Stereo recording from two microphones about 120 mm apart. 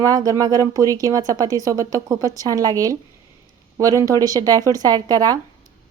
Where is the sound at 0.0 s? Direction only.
30° right (ahead or behind).